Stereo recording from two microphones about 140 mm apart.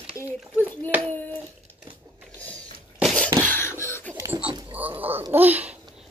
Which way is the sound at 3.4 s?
15° left (ahead or behind).